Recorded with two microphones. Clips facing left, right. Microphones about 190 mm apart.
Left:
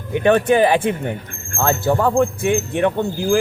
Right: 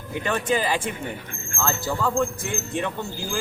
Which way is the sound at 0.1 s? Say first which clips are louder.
Left 10 dB; 65° left (ahead or behind).